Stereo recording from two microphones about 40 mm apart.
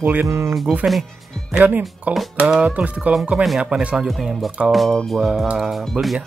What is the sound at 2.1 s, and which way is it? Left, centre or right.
Speech, right.